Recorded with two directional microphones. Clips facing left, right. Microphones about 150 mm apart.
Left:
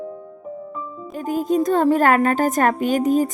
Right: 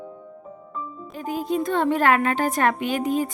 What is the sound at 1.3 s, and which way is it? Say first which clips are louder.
A woman's voice: left 5 dB; 45° left (ahead or behind).